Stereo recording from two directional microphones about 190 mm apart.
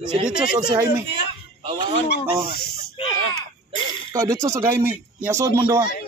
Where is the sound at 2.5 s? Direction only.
55° left (ahead or behind).